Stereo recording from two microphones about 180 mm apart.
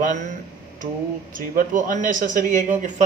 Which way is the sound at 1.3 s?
50° right (ahead or behind).